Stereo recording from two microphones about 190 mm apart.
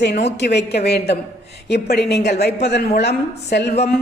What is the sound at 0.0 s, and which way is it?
A woman's voice, 60° left (ahead or behind).